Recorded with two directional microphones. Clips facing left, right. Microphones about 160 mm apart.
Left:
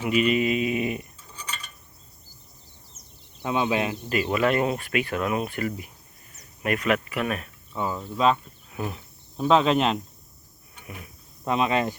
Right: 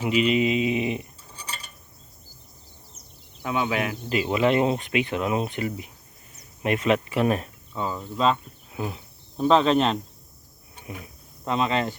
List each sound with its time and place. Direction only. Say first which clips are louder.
0.1 s speech: even; 20° right (ahead or behind)
3.4 s speech: left 1 dB; 20° left (ahead or behind)
4.1 s speech: right 2 dB; 20° right (ahead or behind)
7.7 s cricket: left 1 dB; 15° left (ahead or behind)
7.9 s speech: left 1 dB; 5° left (ahead or behind)
8.7 s cricket: right 1 dB; 15° right (ahead or behind)
9.4 s speech: right 1 dB; 5° left (ahead or behind)
11.4 s speech: left 1 dB; 15° left (ahead or behind)